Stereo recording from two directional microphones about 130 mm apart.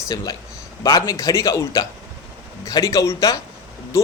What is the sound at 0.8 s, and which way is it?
A man's voice, 30° left (ahead or behind).